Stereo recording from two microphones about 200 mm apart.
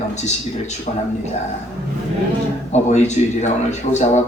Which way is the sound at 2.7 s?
35° left (ahead or behind).